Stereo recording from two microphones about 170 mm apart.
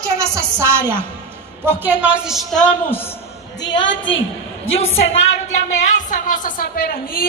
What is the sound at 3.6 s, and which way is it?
Speech, 90° left.